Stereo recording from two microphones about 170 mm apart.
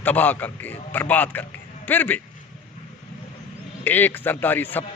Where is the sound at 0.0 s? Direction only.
10° left (ahead or behind).